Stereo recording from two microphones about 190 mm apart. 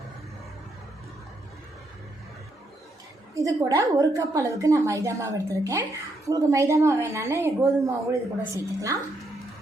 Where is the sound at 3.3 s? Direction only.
15° right (ahead or behind).